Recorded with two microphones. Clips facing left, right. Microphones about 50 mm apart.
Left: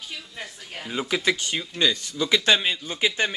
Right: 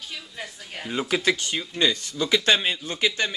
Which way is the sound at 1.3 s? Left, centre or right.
Centre.